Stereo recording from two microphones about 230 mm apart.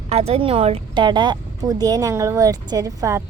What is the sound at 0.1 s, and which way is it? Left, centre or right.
Speech, right.